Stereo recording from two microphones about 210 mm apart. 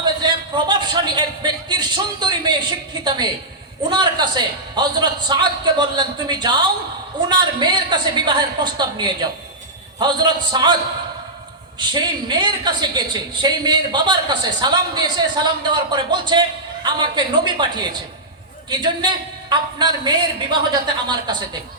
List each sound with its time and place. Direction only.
0.0 s a sound: 20° right (ahead or behind)
3.0 s a woman's voice: 20° right (ahead or behind)
11.9 s a woman's voice: 20° right (ahead or behind)